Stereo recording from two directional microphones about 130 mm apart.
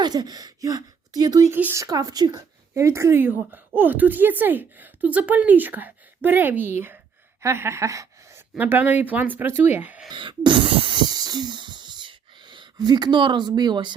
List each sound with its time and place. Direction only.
0.0 s speech: 30° right (ahead or behind)
1.5 s speech: 15° right (ahead or behind)
1.8 s speech: 30° right (ahead or behind)
7.4 s a sound: 20° right (ahead or behind)
8.5 s speech: 15° right (ahead or behind)
10.1 s wheeze: 35° right (ahead or behind)